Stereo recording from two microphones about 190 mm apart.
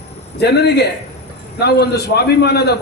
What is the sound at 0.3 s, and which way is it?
A man's voice, 60° left (ahead or behind).